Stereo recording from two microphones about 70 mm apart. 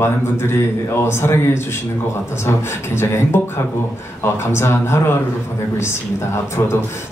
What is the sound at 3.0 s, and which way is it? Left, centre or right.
Speech, left.